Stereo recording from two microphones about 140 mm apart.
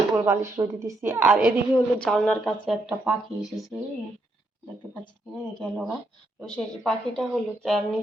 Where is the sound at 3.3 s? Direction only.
45° right (ahead or behind).